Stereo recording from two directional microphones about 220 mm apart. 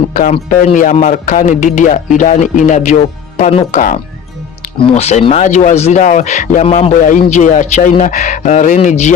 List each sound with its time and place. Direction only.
0.1 s speech: 35° left (ahead or behind)